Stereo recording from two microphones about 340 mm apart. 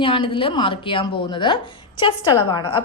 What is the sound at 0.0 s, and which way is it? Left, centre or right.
A woman's voice, centre.